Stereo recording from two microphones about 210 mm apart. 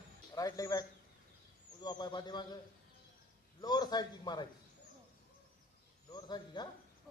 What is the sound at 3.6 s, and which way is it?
Speech, 20° left (ahead or behind).